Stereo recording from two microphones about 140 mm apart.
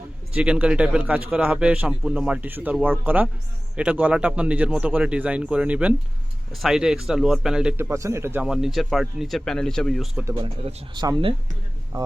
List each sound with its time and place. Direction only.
0.3 s a man's voice: 10° right (ahead or behind)
10.9 s speech: 25° right (ahead or behind)